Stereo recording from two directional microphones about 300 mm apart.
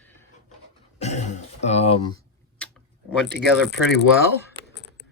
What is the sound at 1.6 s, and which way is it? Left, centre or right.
Speech, left.